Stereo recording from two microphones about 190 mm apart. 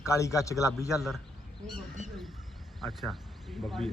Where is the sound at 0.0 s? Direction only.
15° left (ahead or behind).